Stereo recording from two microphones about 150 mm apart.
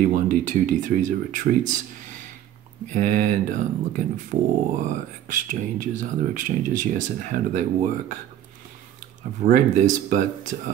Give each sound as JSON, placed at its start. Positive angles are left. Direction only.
{"t": 0.1, "sound": "speech", "side_deg": -60}
{"t": 9.5, "sound": "speech", "side_deg": -55}